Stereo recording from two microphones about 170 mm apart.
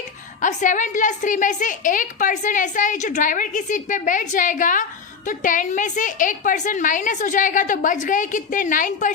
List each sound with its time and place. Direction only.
0.4 s a woman's voice: 50° left (ahead or behind)